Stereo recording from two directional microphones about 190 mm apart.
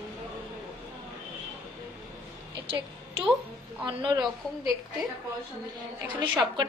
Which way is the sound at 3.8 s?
25° right (ahead or behind).